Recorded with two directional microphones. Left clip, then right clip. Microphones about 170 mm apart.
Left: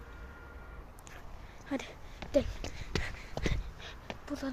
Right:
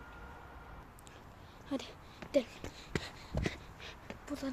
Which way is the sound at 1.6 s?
10° left (ahead or behind).